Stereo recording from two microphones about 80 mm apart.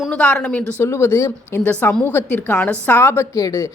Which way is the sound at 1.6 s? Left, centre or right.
Left.